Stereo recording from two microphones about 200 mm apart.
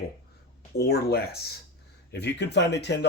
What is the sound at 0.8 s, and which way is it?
Speech, 55° left (ahead or behind).